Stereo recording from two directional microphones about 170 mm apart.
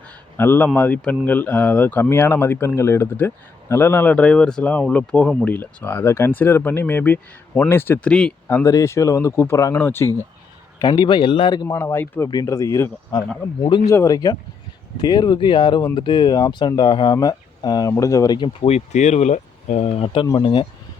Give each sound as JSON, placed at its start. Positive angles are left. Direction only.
{"t": 0.3, "sound": "speech", "side_deg": 10}
{"t": 10.8, "sound": "speech", "side_deg": 25}